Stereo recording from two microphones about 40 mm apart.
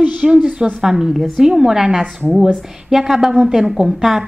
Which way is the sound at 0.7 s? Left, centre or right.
Centre.